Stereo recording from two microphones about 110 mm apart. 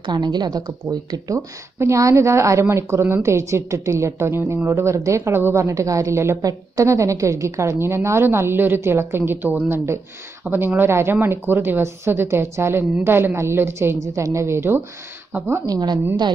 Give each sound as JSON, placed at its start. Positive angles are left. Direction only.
{"t": 0.0, "sound": "speech", "side_deg": -40}
{"t": 15.6, "sound": "a woman's voice", "side_deg": -35}